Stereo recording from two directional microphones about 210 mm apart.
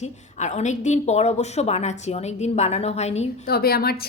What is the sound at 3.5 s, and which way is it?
Speech, 45° left (ahead or behind).